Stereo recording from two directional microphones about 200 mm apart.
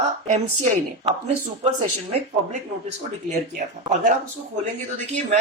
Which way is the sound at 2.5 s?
35° right (ahead or behind).